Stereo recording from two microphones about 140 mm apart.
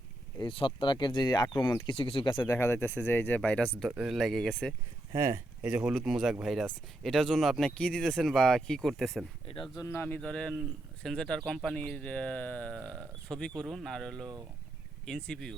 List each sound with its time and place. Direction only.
0.3 s speech: 35° left (ahead or behind)
2.5 s speech: 20° left (ahead or behind)
3.8 s speech: 5° right (ahead or behind)
5.1 s speech: 20° right (ahead or behind)
5.6 s speech: 5° right (ahead or behind)
9.7 s speech: 20° left (ahead or behind)
10.2 s speech: 5° left (ahead or behind)